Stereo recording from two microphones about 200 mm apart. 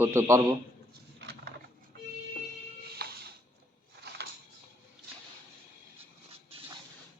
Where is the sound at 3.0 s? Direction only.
50° right (ahead or behind).